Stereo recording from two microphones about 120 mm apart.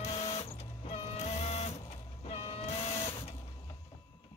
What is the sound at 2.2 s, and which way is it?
Vehicle, 50° left (ahead or behind).